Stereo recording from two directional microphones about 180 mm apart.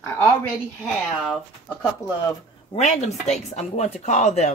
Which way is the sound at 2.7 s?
40° left (ahead or behind).